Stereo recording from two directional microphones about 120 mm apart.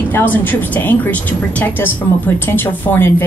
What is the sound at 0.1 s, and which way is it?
Speech, 15° left (ahead or behind).